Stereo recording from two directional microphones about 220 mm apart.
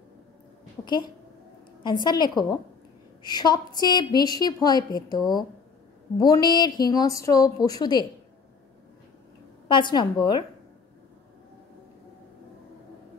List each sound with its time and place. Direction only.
0.8 s a woman's voice: 20° left (ahead or behind)
9.7 s a woman's voice: 20° left (ahead or behind)